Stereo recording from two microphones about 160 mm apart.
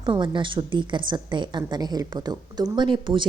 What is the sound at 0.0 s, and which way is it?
A woman's voice, 30° right (ahead or behind).